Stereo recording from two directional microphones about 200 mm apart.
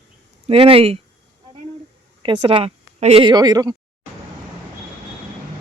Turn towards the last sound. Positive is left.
turn(degrees=-20)  # may be behind; listen again after turning